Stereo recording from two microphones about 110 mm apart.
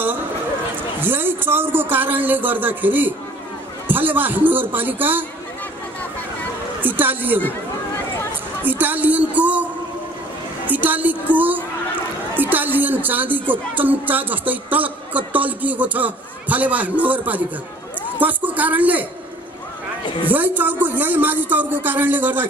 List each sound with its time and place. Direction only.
1.0 s a woman's voice: 20° right (ahead or behind)
6.8 s a woman's voice: 15° right (ahead or behind)
8.6 s a woman's voice: 15° right (ahead or behind)
10.7 s a woman's voice: 15° right (ahead or behind)
20.2 s a woman's voice: 15° right (ahead or behind)